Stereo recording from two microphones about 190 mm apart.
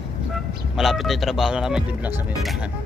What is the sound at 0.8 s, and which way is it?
Speech, centre (ahead or behind).